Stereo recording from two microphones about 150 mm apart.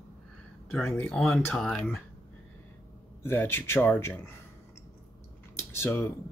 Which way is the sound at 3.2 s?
15° left (ahead or behind).